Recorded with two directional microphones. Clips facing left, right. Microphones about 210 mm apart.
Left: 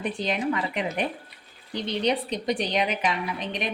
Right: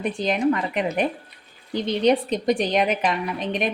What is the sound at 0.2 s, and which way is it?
Speech, 45° right (ahead or behind).